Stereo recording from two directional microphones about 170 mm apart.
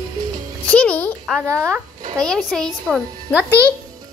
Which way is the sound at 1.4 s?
15° right (ahead or behind).